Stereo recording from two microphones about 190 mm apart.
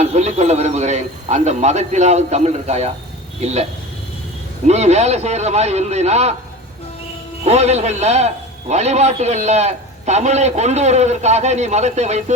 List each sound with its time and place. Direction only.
0.0 s a man's voice: 35° right (ahead or behind)
7.4 s a man's voice: 35° right (ahead or behind)